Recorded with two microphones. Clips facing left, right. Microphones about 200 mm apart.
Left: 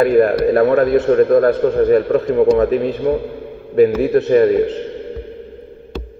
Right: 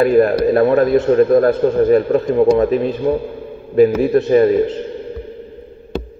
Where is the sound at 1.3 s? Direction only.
40° right (ahead or behind).